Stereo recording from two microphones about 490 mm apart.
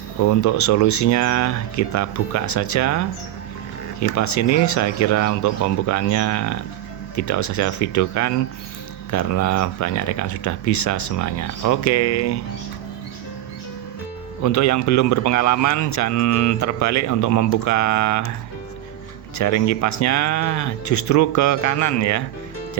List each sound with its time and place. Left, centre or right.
0.3 s a man's voice: left
4.1 s a man's voice: left
14.4 s a man's voice: left
19.4 s a man's voice: left